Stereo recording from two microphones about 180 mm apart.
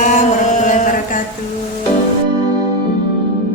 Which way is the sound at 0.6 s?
45° left (ahead or behind).